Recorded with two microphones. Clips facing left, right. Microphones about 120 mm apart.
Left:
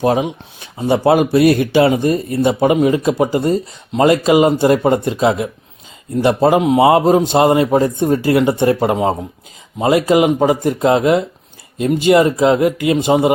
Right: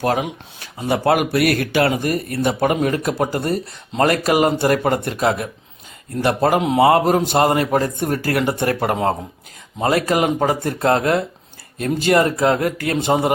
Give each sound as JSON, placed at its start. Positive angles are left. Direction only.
{"t": 0.0, "sound": "speech", "side_deg": 20}